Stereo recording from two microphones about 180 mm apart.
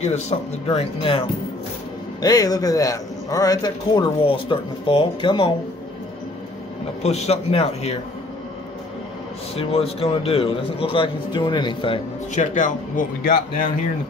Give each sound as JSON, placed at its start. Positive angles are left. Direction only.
{"t": 0.0, "sound": "a man's voice", "side_deg": 40}
{"t": 2.2, "sound": "a man's voice", "side_deg": 20}
{"t": 7.0, "sound": "a man's voice", "side_deg": 35}
{"t": 9.6, "sound": "a man's voice", "side_deg": 35}
{"t": 12.4, "sound": "speech", "side_deg": 45}